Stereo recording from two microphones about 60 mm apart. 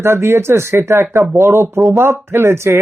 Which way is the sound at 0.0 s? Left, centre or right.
Right.